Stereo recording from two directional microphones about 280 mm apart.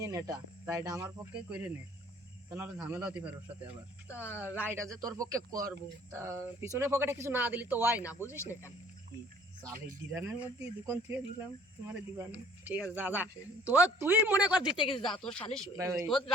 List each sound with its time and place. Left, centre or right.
0.0 s speech: centre
4.1 s speech: centre
4.4 s speech: centre
10.2 s speech: centre
14.8 s speech: centre
15.7 s speech: centre
16.0 s speech: centre